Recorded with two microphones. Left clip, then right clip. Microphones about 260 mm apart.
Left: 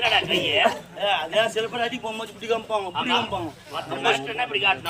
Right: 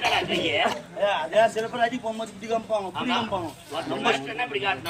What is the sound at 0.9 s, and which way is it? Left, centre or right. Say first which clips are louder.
A man's voice: right 5 dB; centre.